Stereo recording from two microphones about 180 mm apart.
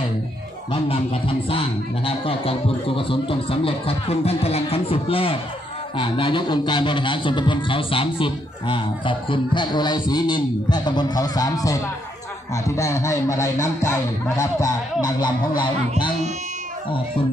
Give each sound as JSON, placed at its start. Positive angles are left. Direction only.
{"t": 0.7, "sound": "a man's voice", "side_deg": 30}